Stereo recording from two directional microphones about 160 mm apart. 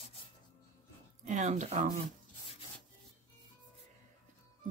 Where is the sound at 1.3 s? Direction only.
50° right (ahead or behind).